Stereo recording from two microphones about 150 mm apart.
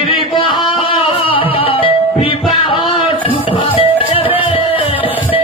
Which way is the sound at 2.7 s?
35° left (ahead or behind).